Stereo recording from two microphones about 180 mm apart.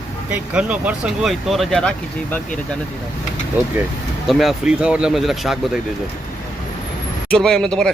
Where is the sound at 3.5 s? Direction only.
10° right (ahead or behind).